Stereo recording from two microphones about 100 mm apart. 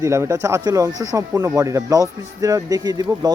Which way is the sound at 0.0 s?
30° right (ahead or behind).